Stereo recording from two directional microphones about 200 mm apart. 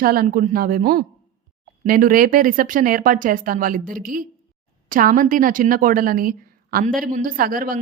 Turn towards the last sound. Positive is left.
turn(degrees=-45)  # may be behind; listen again after turning